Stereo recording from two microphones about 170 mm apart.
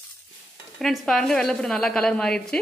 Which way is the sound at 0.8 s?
Centre (ahead or behind).